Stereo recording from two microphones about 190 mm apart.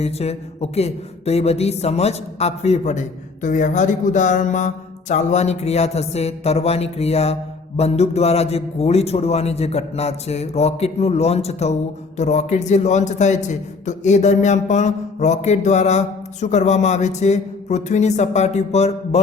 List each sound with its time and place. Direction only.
0.0 s a man's voice: 35° left (ahead or behind)